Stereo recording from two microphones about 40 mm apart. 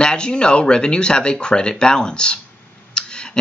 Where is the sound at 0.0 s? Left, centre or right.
Left.